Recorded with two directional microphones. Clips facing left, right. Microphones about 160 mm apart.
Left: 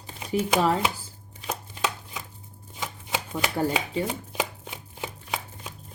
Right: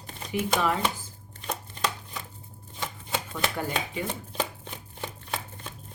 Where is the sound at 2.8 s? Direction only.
5° left (ahead or behind).